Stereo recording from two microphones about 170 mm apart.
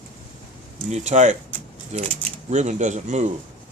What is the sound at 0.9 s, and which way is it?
Speech, 40° right (ahead or behind).